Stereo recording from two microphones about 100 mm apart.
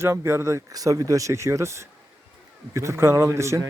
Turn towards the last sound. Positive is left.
turn(degrees=-30)  # may be behind; listen again after turning